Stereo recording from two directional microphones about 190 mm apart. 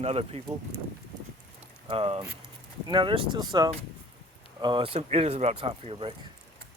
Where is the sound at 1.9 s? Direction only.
30° right (ahead or behind).